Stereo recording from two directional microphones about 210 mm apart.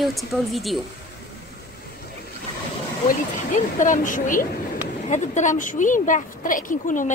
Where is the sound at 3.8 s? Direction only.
40° left (ahead or behind).